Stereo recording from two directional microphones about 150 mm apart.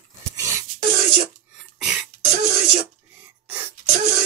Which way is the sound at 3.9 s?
75° right (ahead or behind).